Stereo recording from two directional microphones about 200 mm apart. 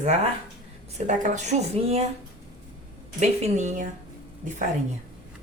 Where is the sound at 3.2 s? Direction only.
35° right (ahead or behind).